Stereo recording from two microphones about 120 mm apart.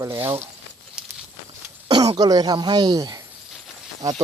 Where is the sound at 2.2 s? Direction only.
35° right (ahead or behind).